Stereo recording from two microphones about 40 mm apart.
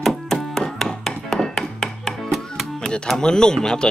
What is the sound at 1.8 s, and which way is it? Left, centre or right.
Music, centre.